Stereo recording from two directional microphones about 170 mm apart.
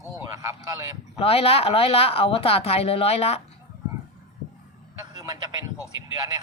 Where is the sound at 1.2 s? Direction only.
35° left (ahead or behind).